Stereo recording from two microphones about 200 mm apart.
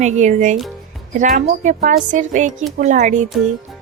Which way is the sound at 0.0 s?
35° right (ahead or behind).